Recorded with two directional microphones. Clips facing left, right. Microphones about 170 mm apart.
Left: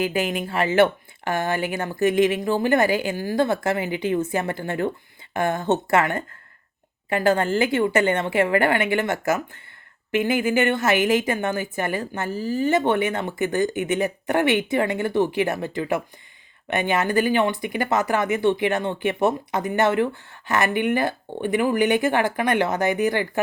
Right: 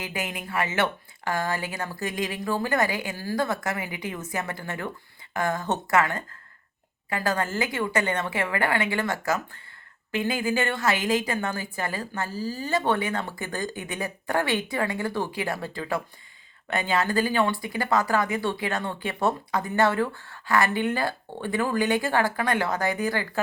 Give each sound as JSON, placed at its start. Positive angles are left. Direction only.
{"t": 0.0, "sound": "speech", "side_deg": 25}